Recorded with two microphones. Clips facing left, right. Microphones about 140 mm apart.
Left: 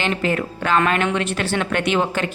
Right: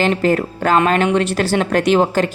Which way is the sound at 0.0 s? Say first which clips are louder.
Right 6 dB; 40° right (ahead or behind).